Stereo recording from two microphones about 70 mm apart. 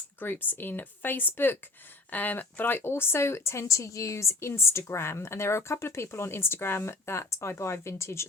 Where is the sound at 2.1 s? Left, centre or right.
Left.